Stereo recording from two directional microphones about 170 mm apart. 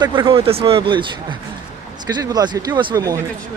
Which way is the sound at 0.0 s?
30° right (ahead or behind).